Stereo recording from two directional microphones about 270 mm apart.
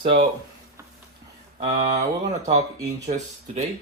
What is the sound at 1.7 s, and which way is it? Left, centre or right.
Speech, right.